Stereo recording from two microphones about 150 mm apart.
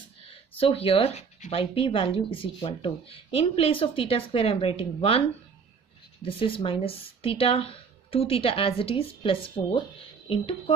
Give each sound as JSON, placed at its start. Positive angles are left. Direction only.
{"t": 0.3, "sound": "speech", "side_deg": 40}
{"t": 6.2, "sound": "speech", "side_deg": 35}